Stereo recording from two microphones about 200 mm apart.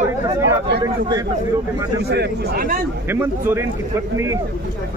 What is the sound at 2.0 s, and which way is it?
Speech, 55° right (ahead or behind).